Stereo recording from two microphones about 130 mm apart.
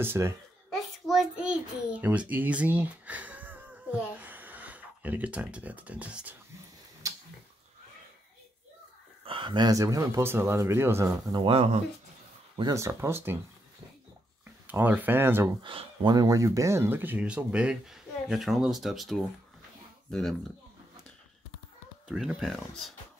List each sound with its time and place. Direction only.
0.0 s speech: 20° right (ahead or behind)
0.7 s child singing: centre (ahead or behind)
7.0 s a sound: 25° right (ahead or behind)
9.2 s speech: 40° right (ahead or behind); by 11.4 s 25° right (ahead or behind)
11.4 s speech: 50° right (ahead or behind)
12.7 s speech: 20° right (ahead or behind)
14.7 s speech: 15° right (ahead or behind)
15.6 s speech: 40° right (ahead or behind); by 20.3 s 5° left (ahead or behind)
22.0 s speech: 5° right (ahead or behind)